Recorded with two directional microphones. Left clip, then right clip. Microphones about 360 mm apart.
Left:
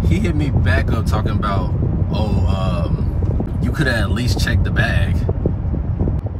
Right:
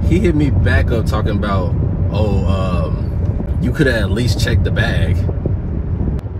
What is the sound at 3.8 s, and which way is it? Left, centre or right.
Speech, left.